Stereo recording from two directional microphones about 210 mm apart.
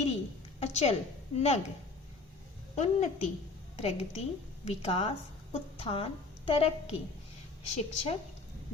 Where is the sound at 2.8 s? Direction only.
35° left (ahead or behind).